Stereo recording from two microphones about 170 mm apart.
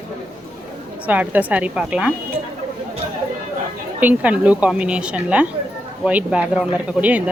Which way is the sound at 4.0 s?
10° right (ahead or behind).